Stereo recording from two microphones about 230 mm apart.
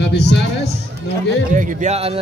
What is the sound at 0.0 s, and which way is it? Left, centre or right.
Speech, left.